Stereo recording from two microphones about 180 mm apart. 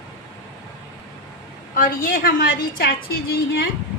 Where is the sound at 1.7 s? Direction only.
50° left (ahead or behind).